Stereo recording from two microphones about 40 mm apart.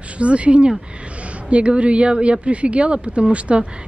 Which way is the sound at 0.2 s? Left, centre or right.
Right.